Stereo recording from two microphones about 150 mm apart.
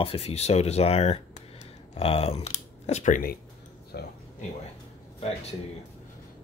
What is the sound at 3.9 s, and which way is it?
Speech, 90° left.